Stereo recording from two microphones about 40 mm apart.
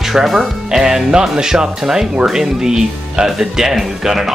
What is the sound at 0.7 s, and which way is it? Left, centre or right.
Music, centre.